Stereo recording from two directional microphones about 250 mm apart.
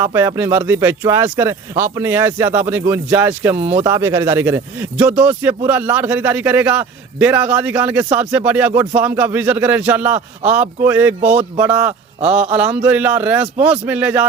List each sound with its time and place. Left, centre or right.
0.0 s speech: centre
11.2 s speech: right
11.5 s speech: centre